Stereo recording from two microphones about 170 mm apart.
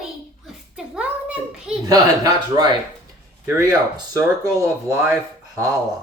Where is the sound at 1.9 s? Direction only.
20° right (ahead or behind).